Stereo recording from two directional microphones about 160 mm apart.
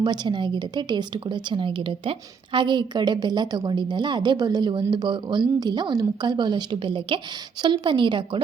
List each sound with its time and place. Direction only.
0.0 s a woman's voice: 30° right (ahead or behind)